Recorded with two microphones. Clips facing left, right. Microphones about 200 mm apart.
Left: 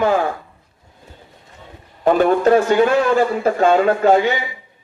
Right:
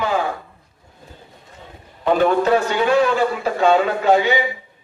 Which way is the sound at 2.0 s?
45° left (ahead or behind).